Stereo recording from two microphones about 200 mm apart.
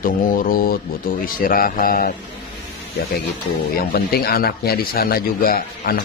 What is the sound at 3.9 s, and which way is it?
A man's voice, 50° left (ahead or behind).